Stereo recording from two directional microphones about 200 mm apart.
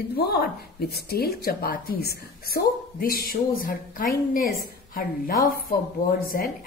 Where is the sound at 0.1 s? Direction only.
50° left (ahead or behind).